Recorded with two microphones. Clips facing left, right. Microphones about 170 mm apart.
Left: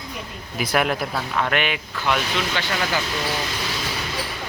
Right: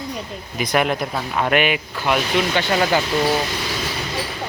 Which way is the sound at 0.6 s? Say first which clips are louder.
Right 2 dB; 5° left (ahead or behind).